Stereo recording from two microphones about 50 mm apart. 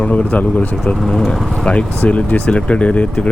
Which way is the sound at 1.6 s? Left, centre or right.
Left.